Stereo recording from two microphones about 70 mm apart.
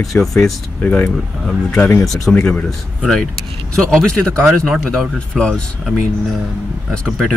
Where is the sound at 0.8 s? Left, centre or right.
Centre.